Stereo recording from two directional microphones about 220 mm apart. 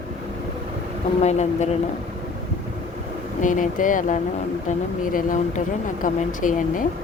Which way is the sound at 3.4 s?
35° left (ahead or behind).